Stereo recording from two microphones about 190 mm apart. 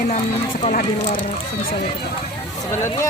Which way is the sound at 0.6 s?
40° left (ahead or behind).